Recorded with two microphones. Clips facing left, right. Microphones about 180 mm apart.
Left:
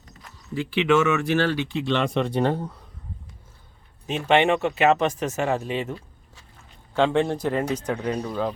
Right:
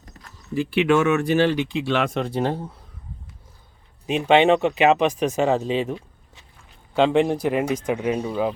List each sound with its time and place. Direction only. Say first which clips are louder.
0.5 s speech: right 2 dB; 10° right (ahead or behind)
4.0 s speech: right 3 dB; 15° right (ahead or behind)